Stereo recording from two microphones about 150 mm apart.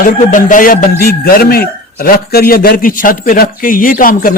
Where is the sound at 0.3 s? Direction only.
60° left (ahead or behind).